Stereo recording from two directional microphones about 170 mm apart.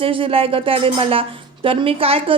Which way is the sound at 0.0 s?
30° right (ahead or behind).